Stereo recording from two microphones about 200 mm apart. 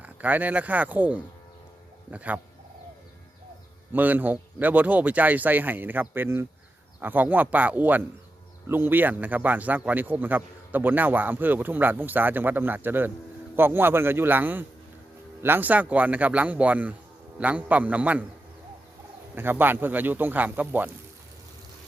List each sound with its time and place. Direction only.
0.0 s speech: 10° right (ahead or behind)
3.9 s speech: 10° right (ahead or behind)
19.4 s speech: 10° right (ahead or behind)